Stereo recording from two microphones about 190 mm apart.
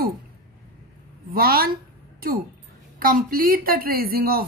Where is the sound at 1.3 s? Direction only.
50° right (ahead or behind).